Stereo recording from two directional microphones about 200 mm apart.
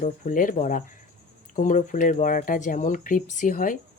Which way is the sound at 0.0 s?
40° left (ahead or behind).